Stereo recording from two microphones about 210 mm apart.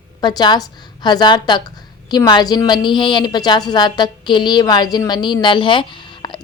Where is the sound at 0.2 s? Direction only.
20° left (ahead or behind).